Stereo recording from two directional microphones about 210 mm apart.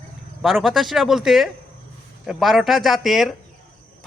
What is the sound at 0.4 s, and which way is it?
Speech, centre (ahead or behind).